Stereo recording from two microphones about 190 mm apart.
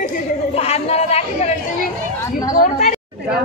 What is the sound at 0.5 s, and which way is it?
Speech, 35° left (ahead or behind).